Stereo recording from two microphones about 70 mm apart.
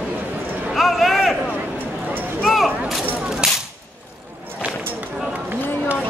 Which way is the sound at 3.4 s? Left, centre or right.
Centre.